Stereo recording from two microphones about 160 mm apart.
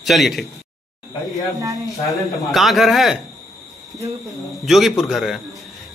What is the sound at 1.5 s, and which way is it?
Speech, 20° right (ahead or behind).